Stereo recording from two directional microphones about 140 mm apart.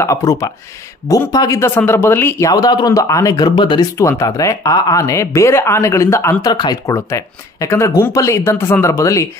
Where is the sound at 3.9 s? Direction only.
20° left (ahead or behind).